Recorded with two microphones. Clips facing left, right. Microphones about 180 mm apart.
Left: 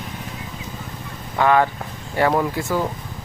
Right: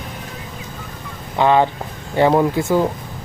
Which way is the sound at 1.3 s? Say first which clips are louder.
Right 2 dB; 25° right (ahead or behind).